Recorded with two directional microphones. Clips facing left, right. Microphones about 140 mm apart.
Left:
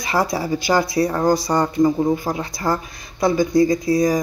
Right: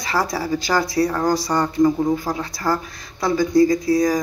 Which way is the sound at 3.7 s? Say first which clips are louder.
Even; 20° left (ahead or behind).